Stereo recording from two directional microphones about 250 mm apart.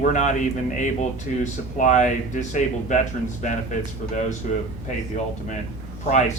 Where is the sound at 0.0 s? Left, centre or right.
Left.